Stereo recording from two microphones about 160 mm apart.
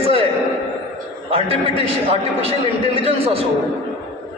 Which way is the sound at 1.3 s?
35° right (ahead or behind).